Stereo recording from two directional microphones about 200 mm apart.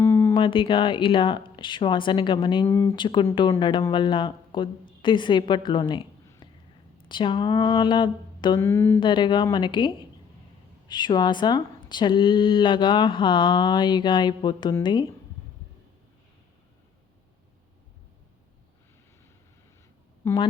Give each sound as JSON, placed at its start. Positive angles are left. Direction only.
{"t": 0.0, "sound": "a sound", "side_deg": 15}
{"t": 0.3, "sound": "speech", "side_deg": 25}
{"t": 2.6, "sound": "a woman's voice", "side_deg": 15}
{"t": 9.0, "sound": "speech", "side_deg": 25}
{"t": 20.2, "sound": "speech", "side_deg": 25}